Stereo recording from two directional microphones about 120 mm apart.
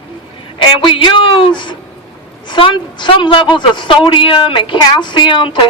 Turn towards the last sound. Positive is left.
turn(degrees=40)  # may be behind; listen again after turning